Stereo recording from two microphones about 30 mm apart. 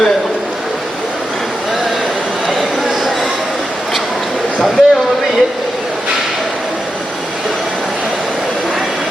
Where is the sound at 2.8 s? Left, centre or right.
Centre.